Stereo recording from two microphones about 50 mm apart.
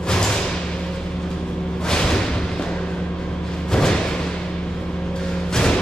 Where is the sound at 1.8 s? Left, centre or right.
Centre.